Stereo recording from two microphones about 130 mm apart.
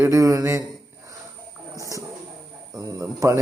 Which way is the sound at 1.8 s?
25° right (ahead or behind).